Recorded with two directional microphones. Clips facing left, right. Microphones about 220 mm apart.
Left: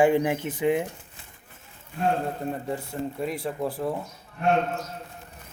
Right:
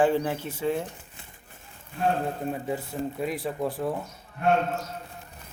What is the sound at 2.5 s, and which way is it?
A man's voice, 5° right (ahead or behind).